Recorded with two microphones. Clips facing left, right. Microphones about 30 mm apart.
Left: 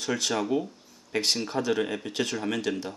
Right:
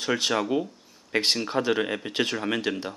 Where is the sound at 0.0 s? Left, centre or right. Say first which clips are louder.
Right 3 dB; right.